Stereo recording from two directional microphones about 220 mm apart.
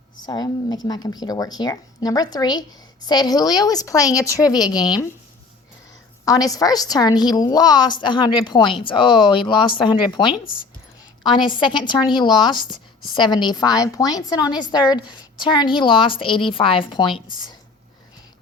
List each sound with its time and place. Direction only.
0.3 s speech: 20° left (ahead or behind)
6.2 s a woman's voice: 15° left (ahead or behind)